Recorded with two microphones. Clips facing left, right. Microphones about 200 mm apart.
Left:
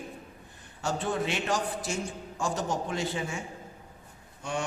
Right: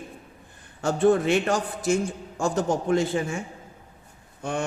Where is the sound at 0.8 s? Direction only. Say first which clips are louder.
Right 10 dB; 50° right (ahead or behind).